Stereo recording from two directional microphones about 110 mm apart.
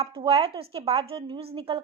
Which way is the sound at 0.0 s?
60° right (ahead or behind).